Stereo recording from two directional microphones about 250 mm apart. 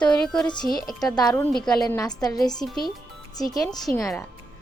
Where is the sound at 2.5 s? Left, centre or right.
Centre.